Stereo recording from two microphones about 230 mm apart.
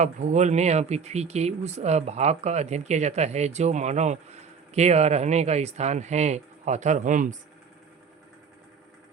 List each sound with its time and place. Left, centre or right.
0.0 s speech: right